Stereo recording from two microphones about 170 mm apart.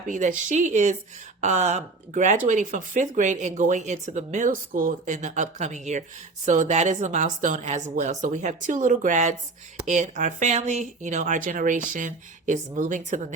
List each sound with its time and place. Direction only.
0.1 s speech: 50° right (ahead or behind)